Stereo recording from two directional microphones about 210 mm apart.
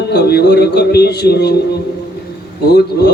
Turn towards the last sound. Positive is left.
turn(degrees=50)  # may be behind; listen again after turning